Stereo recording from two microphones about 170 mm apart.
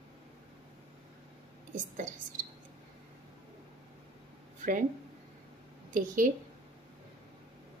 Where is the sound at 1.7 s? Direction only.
50° right (ahead or behind).